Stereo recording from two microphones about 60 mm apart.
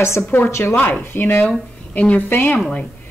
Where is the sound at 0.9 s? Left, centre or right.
Left.